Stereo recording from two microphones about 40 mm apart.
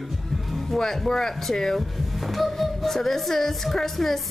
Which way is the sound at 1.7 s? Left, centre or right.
Centre.